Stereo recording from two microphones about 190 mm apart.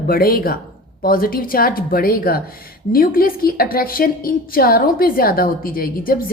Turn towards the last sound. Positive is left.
turn(degrees=50)  # may be behind; listen again after turning